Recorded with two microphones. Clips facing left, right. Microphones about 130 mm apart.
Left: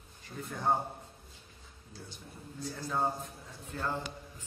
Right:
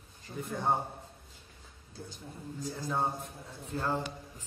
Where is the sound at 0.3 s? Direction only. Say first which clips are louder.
Right 3 dB; 25° right (ahead or behind).